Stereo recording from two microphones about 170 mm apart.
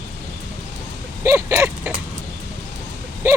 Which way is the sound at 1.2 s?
15° right (ahead or behind).